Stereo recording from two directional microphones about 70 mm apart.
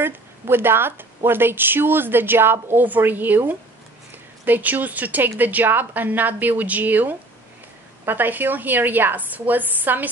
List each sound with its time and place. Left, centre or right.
0.0 s a woman's voice: right